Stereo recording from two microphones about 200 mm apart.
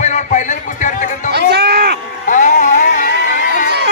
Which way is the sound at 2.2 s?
40° left (ahead or behind).